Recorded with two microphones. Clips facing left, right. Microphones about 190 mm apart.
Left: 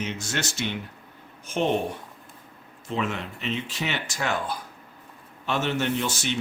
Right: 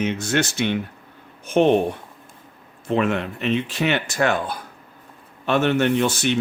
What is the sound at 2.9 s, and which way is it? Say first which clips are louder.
Speech: right 8 dB; 60° right (ahead or behind).